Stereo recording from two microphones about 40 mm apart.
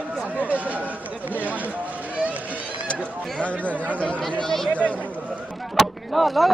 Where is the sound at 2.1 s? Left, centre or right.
Right.